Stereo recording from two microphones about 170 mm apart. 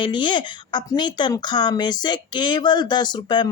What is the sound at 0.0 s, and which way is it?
Speech, 25° left (ahead or behind).